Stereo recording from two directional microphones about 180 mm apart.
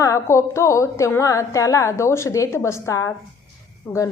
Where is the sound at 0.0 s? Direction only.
15° left (ahead or behind).